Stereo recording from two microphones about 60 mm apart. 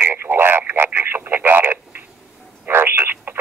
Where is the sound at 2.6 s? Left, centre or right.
Right.